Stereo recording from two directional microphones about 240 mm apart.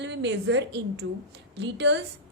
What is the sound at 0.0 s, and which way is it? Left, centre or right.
A woman's voice, right.